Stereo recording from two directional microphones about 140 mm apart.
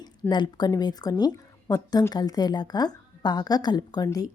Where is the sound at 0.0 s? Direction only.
30° left (ahead or behind).